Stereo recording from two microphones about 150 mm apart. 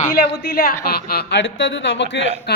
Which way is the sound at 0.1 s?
85° left.